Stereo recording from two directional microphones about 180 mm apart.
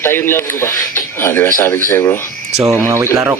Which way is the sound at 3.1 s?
15° right (ahead or behind).